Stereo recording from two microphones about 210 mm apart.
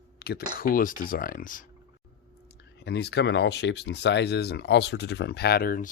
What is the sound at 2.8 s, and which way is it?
Speech, 50° left (ahead or behind).